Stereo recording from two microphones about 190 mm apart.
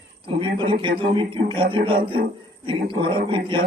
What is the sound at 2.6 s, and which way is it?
Speech, 25° right (ahead or behind).